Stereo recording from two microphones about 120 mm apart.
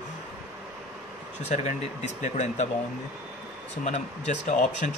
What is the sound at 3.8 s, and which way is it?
Speech, 75° left (ahead or behind).